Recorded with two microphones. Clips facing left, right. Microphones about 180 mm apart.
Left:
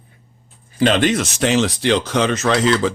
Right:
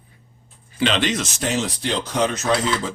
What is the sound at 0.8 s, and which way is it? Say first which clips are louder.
Speech: left 5 dB; 50° left (ahead or behind).